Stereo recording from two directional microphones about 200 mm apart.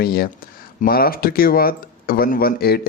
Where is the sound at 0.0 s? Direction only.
50° left (ahead or behind).